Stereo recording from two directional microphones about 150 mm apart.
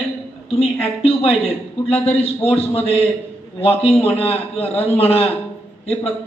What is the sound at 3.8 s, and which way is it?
A man's voice, 40° left (ahead or behind).